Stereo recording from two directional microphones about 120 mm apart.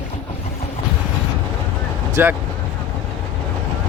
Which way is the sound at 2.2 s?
20° right (ahead or behind).